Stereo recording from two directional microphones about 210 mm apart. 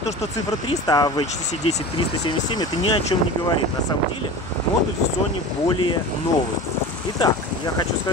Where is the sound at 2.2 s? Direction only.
20° left (ahead or behind).